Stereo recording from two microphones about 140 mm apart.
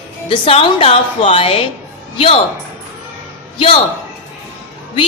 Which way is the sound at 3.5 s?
40° left (ahead or behind).